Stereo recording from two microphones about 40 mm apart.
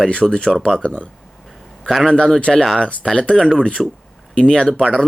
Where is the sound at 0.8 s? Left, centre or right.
Left.